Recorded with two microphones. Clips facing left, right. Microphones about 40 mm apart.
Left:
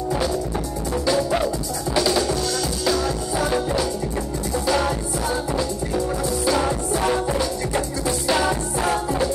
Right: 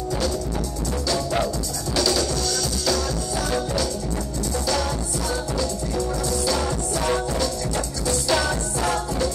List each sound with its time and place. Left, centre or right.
2.0 s music: centre